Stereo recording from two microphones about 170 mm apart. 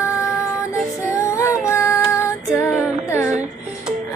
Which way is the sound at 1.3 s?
15° left (ahead or behind).